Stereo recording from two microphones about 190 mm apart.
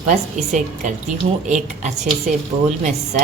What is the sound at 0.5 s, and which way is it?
A woman's voice, 40° right (ahead or behind).